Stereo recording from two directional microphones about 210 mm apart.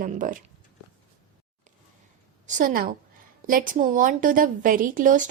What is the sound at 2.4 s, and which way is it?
A woman's voice, 40° right (ahead or behind).